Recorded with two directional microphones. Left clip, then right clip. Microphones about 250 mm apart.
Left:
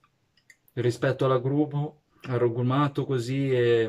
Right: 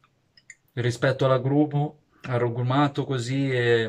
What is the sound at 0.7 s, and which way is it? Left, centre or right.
Speech, centre.